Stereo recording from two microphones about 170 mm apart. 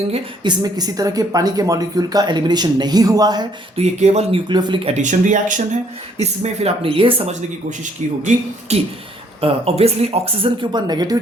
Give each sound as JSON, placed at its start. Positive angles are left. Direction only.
{"t": 0.1, "sound": "speech", "side_deg": -25}
{"t": 3.8, "sound": "speech", "side_deg": -40}
{"t": 4.4, "sound": "speech", "side_deg": -25}
{"t": 8.7, "sound": "speech", "side_deg": -40}